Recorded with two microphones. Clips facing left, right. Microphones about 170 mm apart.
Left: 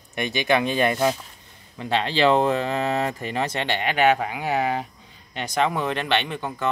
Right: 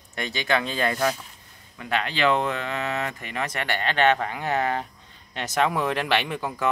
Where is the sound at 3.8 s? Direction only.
10° left (ahead or behind).